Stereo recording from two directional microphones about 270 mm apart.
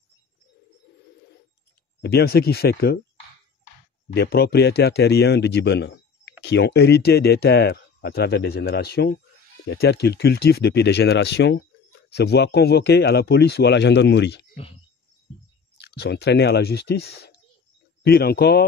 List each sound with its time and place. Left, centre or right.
2.0 s speech: left
4.1 s speech: left
15.8 s speech: left